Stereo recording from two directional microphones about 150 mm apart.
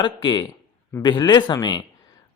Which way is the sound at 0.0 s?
30° left (ahead or behind).